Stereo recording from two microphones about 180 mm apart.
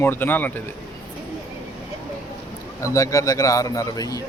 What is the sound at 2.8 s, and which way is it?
Speech, 20° left (ahead or behind).